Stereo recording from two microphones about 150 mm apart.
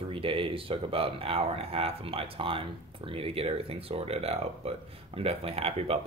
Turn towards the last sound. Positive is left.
turn(degrees=-40)  # may be behind; listen again after turning